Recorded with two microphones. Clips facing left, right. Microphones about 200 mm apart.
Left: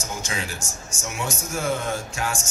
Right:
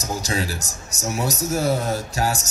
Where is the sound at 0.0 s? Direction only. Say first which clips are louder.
Right 6 dB; 35° right (ahead or behind).